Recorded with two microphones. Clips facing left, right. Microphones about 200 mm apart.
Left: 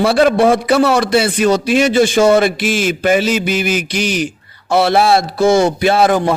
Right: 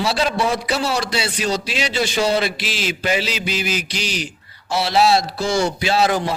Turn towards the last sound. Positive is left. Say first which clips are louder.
# left 6 dB
turn(degrees=55)  # may be behind; listen again after turning